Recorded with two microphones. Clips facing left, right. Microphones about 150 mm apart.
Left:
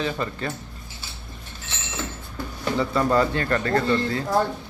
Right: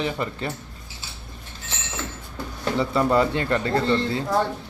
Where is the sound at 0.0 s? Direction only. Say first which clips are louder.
Even; 20° right (ahead or behind).